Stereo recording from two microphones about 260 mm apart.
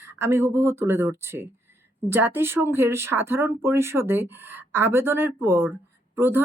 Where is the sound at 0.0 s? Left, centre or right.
Centre.